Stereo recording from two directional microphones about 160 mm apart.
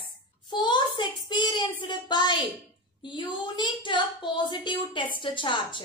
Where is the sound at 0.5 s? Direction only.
25° left (ahead or behind).